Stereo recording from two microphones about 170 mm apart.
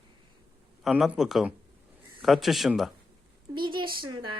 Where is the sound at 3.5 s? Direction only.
30° right (ahead or behind).